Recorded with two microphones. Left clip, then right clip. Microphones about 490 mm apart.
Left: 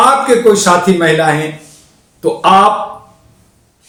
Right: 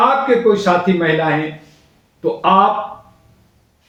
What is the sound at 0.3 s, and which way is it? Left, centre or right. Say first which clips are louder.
Speech: left 5 dB; right.